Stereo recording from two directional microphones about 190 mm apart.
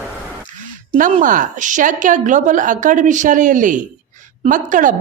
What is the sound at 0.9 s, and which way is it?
A woman's voice, 45° right (ahead or behind).